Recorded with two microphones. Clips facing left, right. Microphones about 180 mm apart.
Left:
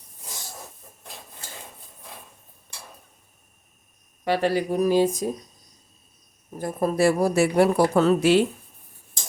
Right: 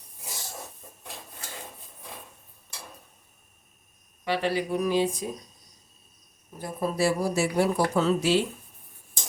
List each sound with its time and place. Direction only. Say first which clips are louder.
4.2 s speech: left 4 dB; 45° left (ahead or behind)
6.6 s speech: left 5 dB; 50° left (ahead or behind)